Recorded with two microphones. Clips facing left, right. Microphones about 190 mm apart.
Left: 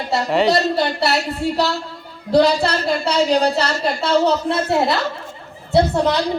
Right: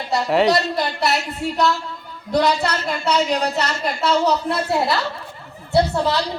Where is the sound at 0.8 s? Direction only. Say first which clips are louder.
Left 3 dB; 30° left (ahead or behind).